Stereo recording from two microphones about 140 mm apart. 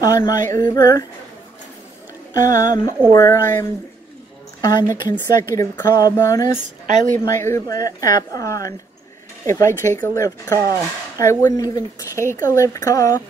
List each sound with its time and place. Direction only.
0.0 s speech: 25° left (ahead or behind)
2.5 s speech: 65° right (ahead or behind)
3.2 s speech: 20° left (ahead or behind)
4.6 s speech: 25° left (ahead or behind)
6.5 s speech: 60° right (ahead or behind)
7.2 s speech: 20° left (ahead or behind)